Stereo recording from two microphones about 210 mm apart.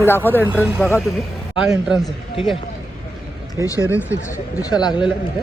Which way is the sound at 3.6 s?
15° left (ahead or behind).